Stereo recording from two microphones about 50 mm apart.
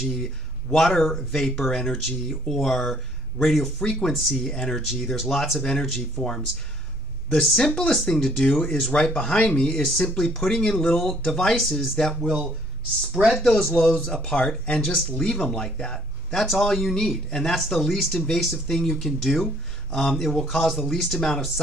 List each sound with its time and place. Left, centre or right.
0.1 s speech: centre
5.6 s speech: centre
13.3 s speech: centre